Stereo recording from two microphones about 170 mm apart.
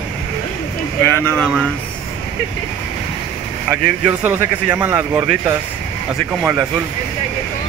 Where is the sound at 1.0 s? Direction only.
10° left (ahead or behind).